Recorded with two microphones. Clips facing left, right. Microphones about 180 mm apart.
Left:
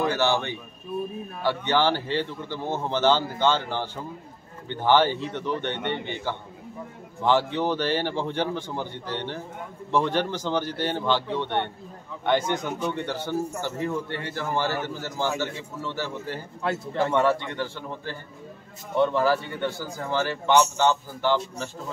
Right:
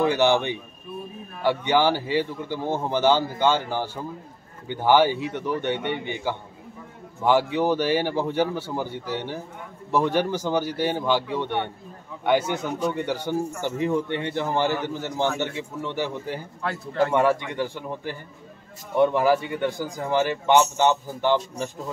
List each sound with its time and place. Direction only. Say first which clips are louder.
0.0 s speech: right 4 dB; 15° right (ahead or behind)